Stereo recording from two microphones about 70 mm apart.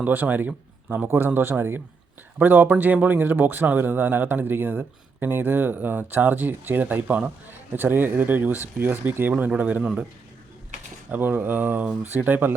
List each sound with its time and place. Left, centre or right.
0.0 s speech: right
9.5 s speech: centre
9.8 s a man's voice: centre
11.1 s speech: right